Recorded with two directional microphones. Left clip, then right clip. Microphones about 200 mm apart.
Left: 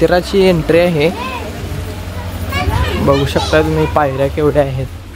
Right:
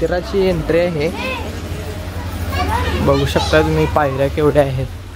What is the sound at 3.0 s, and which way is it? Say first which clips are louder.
Speech: left 3 dB; 10° left (ahead or behind).